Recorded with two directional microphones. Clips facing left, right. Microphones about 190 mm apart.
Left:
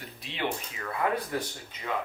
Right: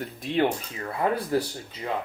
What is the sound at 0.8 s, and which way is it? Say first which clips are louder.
Speech: right 3 dB; 30° right (ahead or behind).